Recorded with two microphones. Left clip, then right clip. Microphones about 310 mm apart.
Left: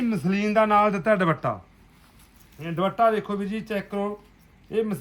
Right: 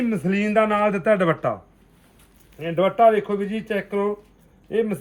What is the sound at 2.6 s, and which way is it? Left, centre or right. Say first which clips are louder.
Speech: right 5 dB; centre.